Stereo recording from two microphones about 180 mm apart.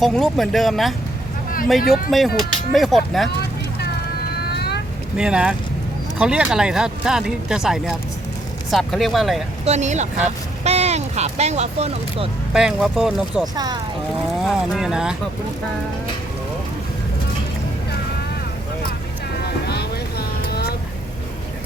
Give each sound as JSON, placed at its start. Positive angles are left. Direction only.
{"t": 0.0, "sound": "speech", "side_deg": 0}
{"t": 2.0, "sound": "speech", "side_deg": 0}
{"t": 4.5, "sound": "vehicle", "side_deg": 65}
{"t": 5.1, "sound": "speech", "side_deg": -5}
{"t": 9.6, "sound": "speech", "side_deg": -40}
{"t": 12.5, "sound": "speech", "side_deg": -5}
{"t": 19.6, "sound": "vehicle", "side_deg": 65}